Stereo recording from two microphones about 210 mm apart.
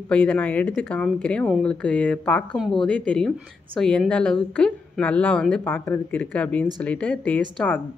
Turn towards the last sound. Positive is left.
turn(degrees=5)  # may be behind; listen again after turning